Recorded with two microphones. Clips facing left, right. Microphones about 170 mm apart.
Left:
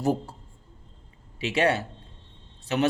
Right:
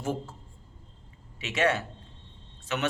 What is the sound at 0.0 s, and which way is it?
Speech, 35° left (ahead or behind).